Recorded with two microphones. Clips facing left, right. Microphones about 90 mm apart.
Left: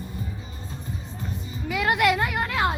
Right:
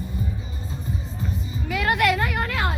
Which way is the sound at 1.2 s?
5° left (ahead or behind).